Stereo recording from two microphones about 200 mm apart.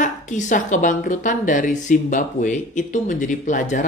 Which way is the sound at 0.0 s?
40° left (ahead or behind).